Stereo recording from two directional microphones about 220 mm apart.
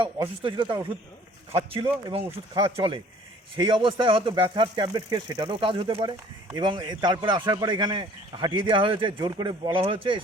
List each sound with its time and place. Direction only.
0.2 s speech: 20° right (ahead or behind)